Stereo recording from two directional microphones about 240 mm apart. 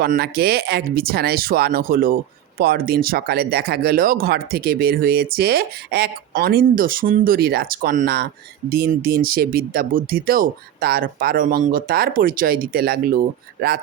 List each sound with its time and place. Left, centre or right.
0.0 s speech: right